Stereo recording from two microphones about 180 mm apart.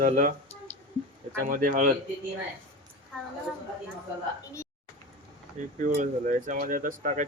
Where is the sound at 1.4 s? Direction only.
50° right (ahead or behind).